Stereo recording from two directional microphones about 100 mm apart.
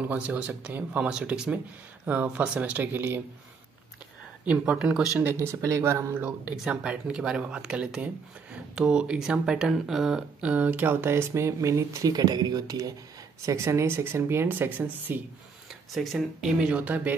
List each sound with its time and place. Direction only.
0.1 s speech: 15° right (ahead or behind)
4.5 s speech: 10° right (ahead or behind)
5.2 s speech: 25° right (ahead or behind)
6.2 s speech: 10° right (ahead or behind)
10.5 s speech: 15° right (ahead or behind)
15.9 s speech: centre (ahead or behind); by 17.1 s 15° right (ahead or behind)